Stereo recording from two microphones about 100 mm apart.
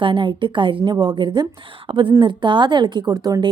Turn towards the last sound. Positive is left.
turn(degrees=-40)  # may be behind; listen again after turning